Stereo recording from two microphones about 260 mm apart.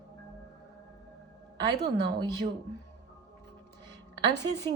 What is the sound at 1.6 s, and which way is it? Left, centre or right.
Speech, centre.